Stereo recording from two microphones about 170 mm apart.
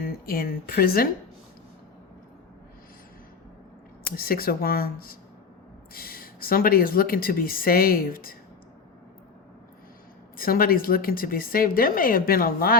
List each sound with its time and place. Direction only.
0.0 s speech: 60° left (ahead or behind)
4.0 s speech: 60° left (ahead or behind)
10.3 s speech: 60° left (ahead or behind)